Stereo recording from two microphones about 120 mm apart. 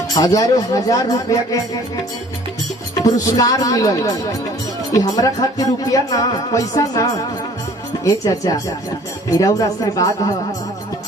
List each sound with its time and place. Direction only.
0.1 s speech: 30° left (ahead or behind)
3.0 s speech: 30° left (ahead or behind)